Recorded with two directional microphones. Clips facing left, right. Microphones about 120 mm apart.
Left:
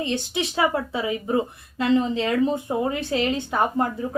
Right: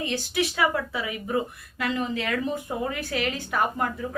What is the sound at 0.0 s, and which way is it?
A woman's voice, 25° left (ahead or behind).